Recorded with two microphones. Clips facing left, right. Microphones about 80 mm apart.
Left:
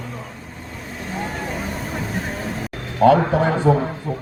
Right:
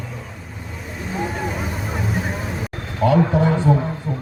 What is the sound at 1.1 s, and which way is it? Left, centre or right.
Vehicle, centre.